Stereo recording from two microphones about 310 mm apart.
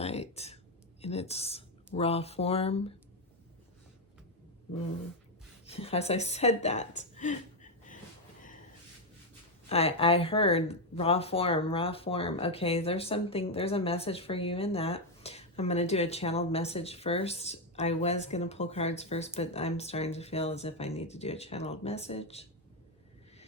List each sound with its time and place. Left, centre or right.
0.0 s a sound: centre
1.0 s speech: centre
5.6 s a woman's voice: centre
9.6 s speech: centre